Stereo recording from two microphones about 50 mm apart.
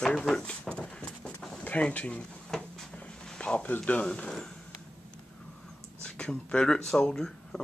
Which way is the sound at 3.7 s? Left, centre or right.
Left.